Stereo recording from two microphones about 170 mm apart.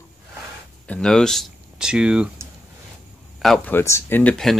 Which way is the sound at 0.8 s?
5° left (ahead or behind).